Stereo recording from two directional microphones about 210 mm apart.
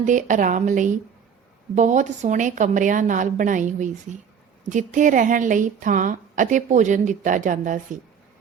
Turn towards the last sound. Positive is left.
turn(degrees=-40)  # may be behind; listen again after turning